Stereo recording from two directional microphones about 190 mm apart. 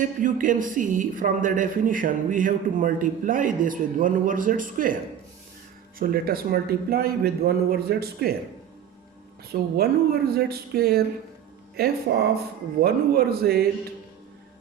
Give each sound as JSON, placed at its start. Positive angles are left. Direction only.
{"t": 0.0, "sound": "speech", "side_deg": -45}
{"t": 6.0, "sound": "speech", "side_deg": -50}
{"t": 9.5, "sound": "speech", "side_deg": -55}